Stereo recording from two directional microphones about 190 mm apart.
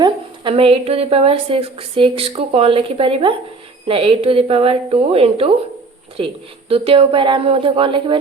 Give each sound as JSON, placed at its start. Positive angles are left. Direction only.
{"t": 0.0, "sound": "speech", "side_deg": -30}